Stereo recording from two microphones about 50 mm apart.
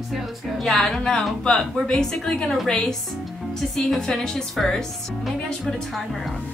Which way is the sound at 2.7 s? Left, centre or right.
Centre.